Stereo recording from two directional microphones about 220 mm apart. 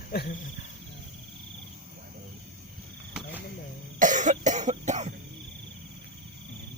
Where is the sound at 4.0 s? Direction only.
35° right (ahead or behind).